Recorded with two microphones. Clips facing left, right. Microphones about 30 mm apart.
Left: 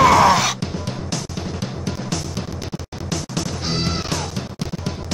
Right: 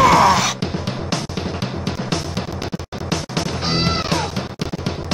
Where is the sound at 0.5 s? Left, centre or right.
Right.